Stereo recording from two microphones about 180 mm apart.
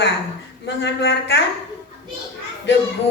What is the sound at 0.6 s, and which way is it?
Speech, 75° left (ahead or behind).